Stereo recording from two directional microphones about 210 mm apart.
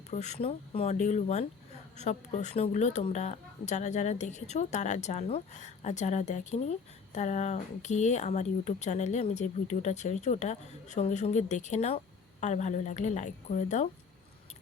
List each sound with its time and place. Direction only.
0.1 s a woman's voice: 35° left (ahead or behind)